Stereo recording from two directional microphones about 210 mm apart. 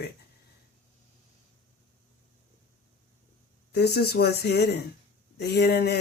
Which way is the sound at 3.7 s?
50° left (ahead or behind).